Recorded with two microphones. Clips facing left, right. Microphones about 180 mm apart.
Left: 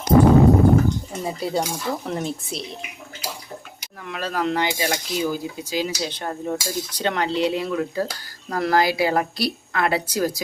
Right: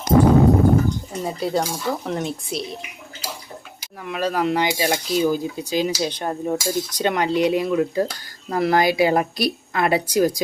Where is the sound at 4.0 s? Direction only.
15° right (ahead or behind).